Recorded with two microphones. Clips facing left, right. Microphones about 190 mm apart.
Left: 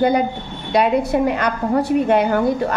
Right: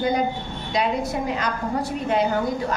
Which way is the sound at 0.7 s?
60° left (ahead or behind).